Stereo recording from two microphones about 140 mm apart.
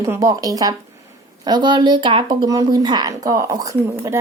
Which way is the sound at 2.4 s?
25° right (ahead or behind).